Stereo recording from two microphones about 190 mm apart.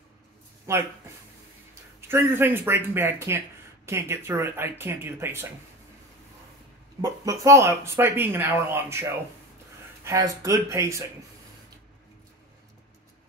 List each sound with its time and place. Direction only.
0.7 s speech: 15° right (ahead or behind)
2.0 s speech: 15° right (ahead or behind)
7.0 s speech: 15° right (ahead or behind)